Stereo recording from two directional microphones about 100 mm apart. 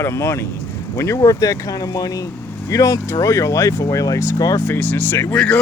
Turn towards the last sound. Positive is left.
turn(degrees=10)  # may be behind; listen again after turning